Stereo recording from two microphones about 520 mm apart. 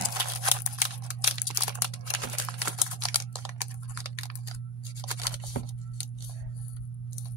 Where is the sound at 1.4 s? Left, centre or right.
Left.